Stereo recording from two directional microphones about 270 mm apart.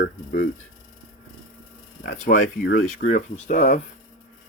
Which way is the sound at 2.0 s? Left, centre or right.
Left.